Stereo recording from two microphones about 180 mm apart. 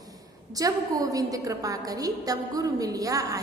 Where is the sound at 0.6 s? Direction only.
20° right (ahead or behind).